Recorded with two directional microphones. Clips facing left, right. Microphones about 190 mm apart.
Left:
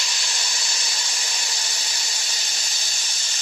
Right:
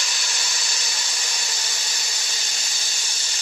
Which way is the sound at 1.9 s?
45° right (ahead or behind).